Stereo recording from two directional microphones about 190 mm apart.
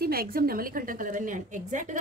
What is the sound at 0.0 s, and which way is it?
A woman's voice, 50° right (ahead or behind).